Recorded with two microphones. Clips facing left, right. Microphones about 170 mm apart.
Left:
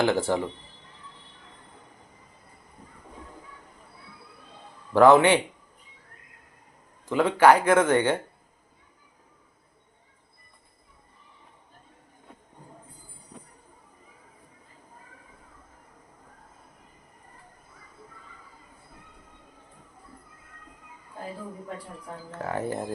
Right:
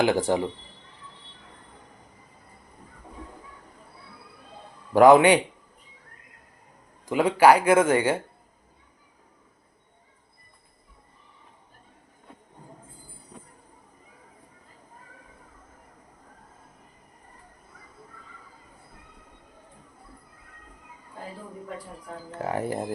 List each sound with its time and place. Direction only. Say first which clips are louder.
0.0 s speech: right 1 dB; 15° right (ahead or behind)
4.9 s speech: right 2 dB; 15° right (ahead or behind)
7.1 s speech: right 1 dB; 10° right (ahead or behind)
22.4 s speech: right 2 dB; 15° right (ahead or behind)